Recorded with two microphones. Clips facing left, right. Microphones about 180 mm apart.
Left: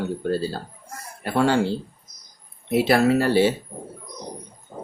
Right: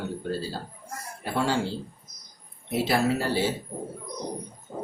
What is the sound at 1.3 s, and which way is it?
Speech, 60° left (ahead or behind).